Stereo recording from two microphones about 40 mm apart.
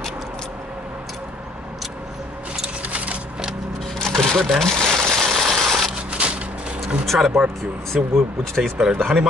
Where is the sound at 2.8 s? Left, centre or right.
Right.